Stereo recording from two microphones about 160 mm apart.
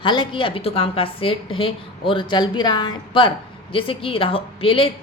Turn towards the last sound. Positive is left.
turn(degrees=35)  # may be behind; listen again after turning